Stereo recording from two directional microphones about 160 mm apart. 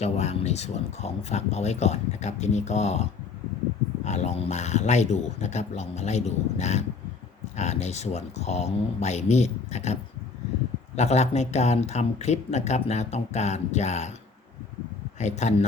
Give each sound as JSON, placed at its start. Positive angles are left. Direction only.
{"t": 0.0, "sound": "speech", "side_deg": 45}
{"t": 15.2, "sound": "speech", "side_deg": 45}